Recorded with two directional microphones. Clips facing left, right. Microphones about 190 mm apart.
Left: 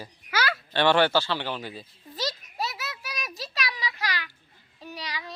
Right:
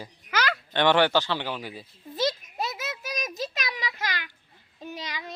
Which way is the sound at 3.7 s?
20° right (ahead or behind).